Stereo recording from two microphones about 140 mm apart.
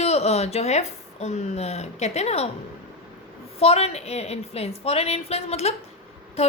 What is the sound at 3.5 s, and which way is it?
A woman's voice, 45° left (ahead or behind).